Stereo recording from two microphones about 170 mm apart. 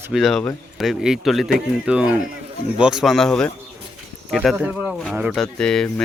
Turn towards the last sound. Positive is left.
turn(degrees=5)  # may be behind; listen again after turning